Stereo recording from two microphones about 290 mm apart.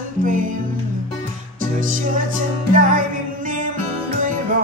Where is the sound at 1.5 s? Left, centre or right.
Right.